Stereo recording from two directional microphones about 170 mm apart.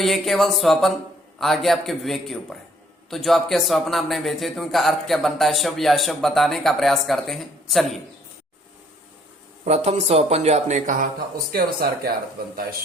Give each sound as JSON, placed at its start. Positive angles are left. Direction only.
{"t": 0.0, "sound": "a man's voice", "side_deg": 0}
{"t": 9.6, "sound": "speech", "side_deg": -40}
{"t": 11.5, "sound": "speech", "side_deg": -65}